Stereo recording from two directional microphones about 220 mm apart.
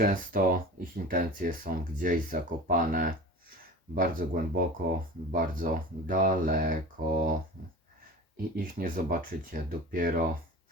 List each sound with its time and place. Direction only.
0.0 s speech: 40° right (ahead or behind)
7.0 s speech: 50° right (ahead or behind)
8.5 s speech: 40° right (ahead or behind)